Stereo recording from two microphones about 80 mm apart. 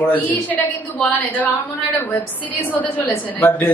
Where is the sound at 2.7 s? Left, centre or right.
Centre.